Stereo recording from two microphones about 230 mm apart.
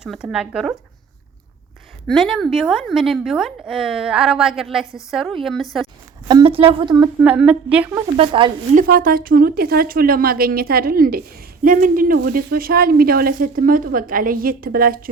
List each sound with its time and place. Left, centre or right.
0.0 s a woman's voice: centre
2.0 s a woman's voice: centre
6.2 s a woman's voice: right
7.2 s a woman's voice: centre
8.0 s a woman's voice: right
8.7 s speech: right